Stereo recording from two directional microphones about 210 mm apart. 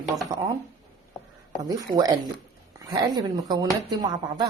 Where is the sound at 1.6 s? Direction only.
15° right (ahead or behind).